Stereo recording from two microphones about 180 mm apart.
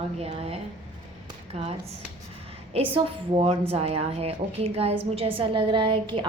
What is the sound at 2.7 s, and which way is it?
A woman's voice, 30° right (ahead or behind).